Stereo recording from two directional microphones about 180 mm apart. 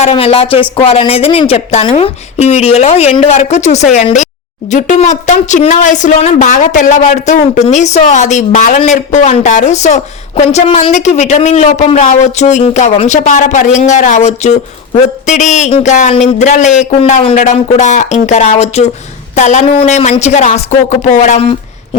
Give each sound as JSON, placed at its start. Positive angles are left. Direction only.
{"t": 0.0, "sound": "speech", "side_deg": 30}